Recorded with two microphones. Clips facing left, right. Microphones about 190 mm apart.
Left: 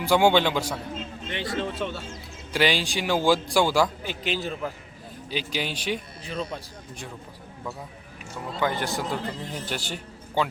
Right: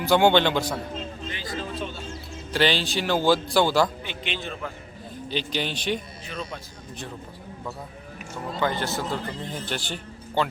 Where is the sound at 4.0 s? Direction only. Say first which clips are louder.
Left 4 dB; 40° left (ahead or behind).